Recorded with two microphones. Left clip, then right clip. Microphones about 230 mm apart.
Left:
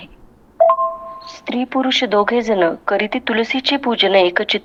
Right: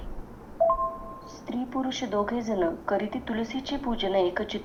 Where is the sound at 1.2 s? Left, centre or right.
Left.